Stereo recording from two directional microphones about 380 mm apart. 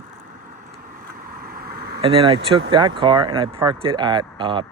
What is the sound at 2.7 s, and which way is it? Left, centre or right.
Speech, centre.